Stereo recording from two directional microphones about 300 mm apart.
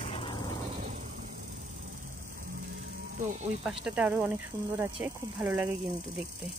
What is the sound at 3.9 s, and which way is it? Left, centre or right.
Speech, centre.